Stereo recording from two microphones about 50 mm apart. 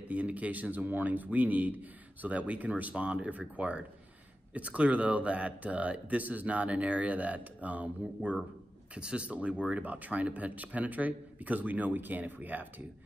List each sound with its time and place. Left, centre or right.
0.1 s speech: right